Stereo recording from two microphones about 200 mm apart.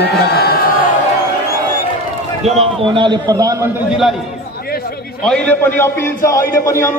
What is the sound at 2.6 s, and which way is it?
A man's voice, 25° right (ahead or behind).